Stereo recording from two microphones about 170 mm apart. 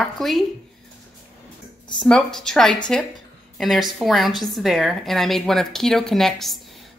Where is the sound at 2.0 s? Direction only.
5° left (ahead or behind).